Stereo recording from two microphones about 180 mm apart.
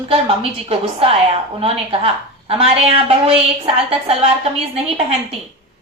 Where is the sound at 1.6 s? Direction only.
30° right (ahead or behind).